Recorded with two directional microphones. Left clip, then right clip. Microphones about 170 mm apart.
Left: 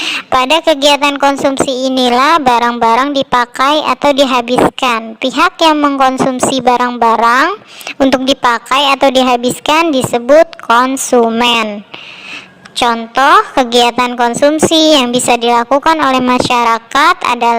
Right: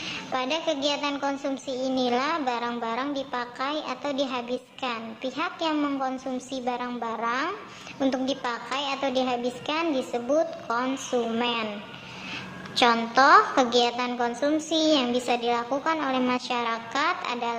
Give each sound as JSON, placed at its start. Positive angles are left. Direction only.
{"t": 0.0, "sound": "a woman's voice", "side_deg": 50}
{"t": 12.7, "sound": "a woman's voice", "side_deg": 40}